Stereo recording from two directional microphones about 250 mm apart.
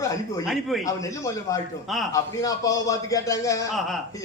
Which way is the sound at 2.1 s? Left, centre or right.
Centre.